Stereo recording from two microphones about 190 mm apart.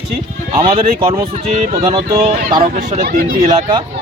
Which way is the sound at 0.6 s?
30° right (ahead or behind).